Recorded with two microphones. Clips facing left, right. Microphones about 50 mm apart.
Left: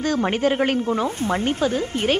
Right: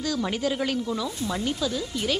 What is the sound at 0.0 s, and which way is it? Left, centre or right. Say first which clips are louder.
Snake: left 6 dB; left.